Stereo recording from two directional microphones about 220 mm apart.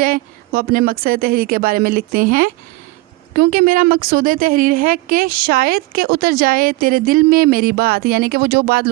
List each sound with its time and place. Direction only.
0.0 s a woman's voice: 40° right (ahead or behind)